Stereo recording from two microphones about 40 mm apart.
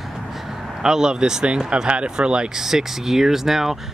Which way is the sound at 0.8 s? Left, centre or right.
Centre.